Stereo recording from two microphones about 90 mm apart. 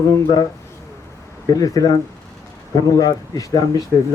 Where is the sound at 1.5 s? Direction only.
45° left (ahead or behind).